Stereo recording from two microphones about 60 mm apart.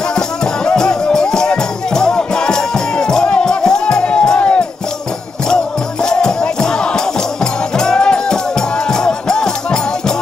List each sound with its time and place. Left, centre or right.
0.7 s music: centre
6.0 s music: centre